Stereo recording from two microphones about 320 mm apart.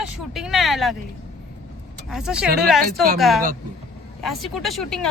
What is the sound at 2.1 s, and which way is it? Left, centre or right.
Speech, centre.